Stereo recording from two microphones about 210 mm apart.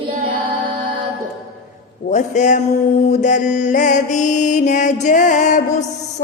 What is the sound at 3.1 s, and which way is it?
Mantra, 35° left (ahead or behind).